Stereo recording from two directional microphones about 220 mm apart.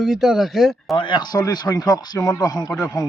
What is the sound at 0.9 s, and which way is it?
Speech, 20° left (ahead or behind).